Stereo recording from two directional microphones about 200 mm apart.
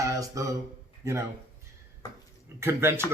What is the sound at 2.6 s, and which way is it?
Speech, 15° right (ahead or behind).